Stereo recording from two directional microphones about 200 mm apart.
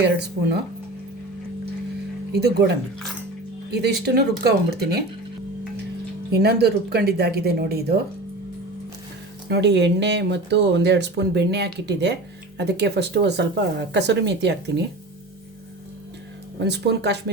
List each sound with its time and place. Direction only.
0.0 s speech: 55° right (ahead or behind)
3.7 s speech: 55° right (ahead or behind)
6.3 s speech: 55° right (ahead or behind)
9.5 s speech: 55° right (ahead or behind)
16.6 s speech: 60° right (ahead or behind)